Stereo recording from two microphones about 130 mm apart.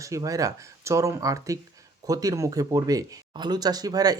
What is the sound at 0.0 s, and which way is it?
Speech, 25° right (ahead or behind).